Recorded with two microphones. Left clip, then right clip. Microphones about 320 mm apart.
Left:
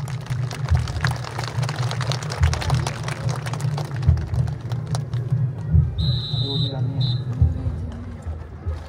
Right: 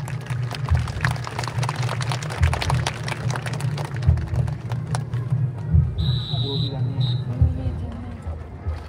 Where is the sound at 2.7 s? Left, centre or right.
Right.